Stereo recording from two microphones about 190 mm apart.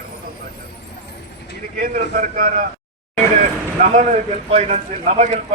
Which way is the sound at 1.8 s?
45° right (ahead or behind).